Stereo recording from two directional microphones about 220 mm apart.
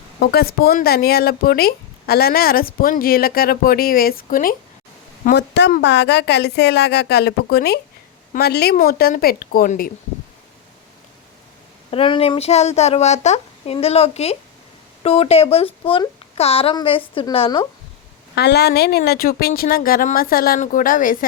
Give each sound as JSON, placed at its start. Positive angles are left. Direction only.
{"t": 0.2, "sound": "speech", "side_deg": 45}
{"t": 11.9, "sound": "speech", "side_deg": 25}
{"t": 18.3, "sound": "speech", "side_deg": 45}